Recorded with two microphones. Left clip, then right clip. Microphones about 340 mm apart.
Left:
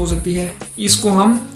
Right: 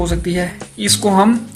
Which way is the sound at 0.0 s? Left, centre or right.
Right.